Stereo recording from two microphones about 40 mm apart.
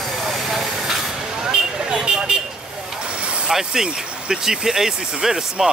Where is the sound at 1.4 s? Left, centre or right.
Centre.